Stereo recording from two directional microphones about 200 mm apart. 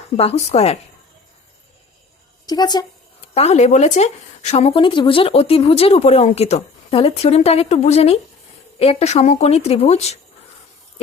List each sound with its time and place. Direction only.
0.2 s speech: 30° left (ahead or behind)
2.5 s a woman's voice: 20° left (ahead or behind)
3.3 s speech: 30° left (ahead or behind)